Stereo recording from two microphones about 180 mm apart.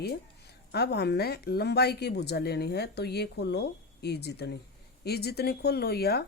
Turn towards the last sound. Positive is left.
turn(degrees=60)  # may be behind; listen again after turning